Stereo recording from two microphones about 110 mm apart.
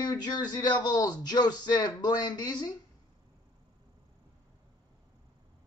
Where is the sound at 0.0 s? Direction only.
40° left (ahead or behind).